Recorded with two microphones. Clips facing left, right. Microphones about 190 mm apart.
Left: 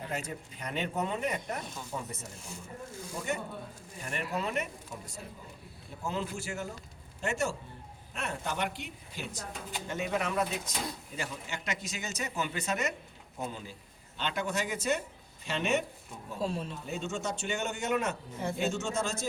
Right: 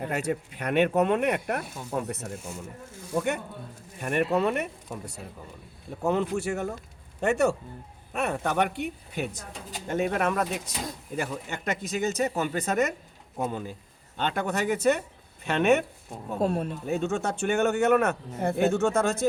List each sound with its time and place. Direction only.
0.0 s speech: 70° right (ahead or behind)
9.8 s a man's voice: 50° right (ahead or behind)